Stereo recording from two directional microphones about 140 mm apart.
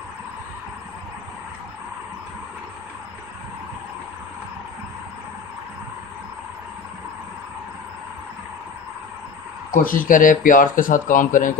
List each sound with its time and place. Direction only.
9.7 s speech: 75° left (ahead or behind)